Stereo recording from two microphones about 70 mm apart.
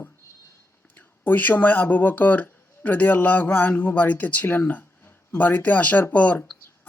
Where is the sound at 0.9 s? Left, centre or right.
Left.